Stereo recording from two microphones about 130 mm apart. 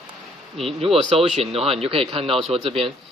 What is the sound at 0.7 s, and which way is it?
Speech, 50° right (ahead or behind).